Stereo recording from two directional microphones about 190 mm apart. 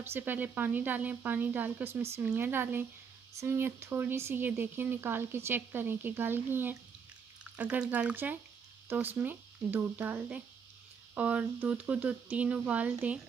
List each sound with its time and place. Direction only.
0.0 s speech: 10° right (ahead or behind)